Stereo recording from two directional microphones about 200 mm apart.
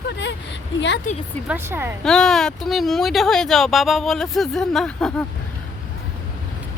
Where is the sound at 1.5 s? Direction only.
10° right (ahead or behind).